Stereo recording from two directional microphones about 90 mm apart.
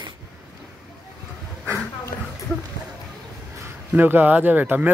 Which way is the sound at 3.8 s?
20° right (ahead or behind).